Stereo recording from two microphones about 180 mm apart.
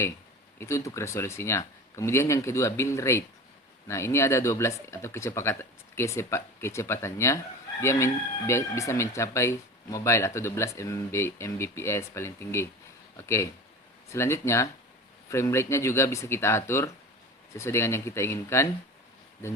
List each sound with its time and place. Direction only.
0.6 s speech: 15° left (ahead or behind)